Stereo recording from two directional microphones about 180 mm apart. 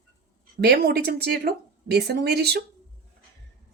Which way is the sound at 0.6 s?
60° right (ahead or behind).